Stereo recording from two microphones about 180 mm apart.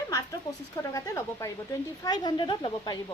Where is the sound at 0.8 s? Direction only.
15° left (ahead or behind).